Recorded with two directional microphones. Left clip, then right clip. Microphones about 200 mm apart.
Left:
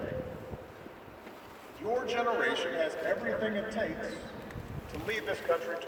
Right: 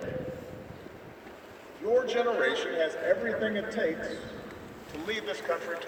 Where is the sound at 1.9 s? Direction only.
50° left (ahead or behind).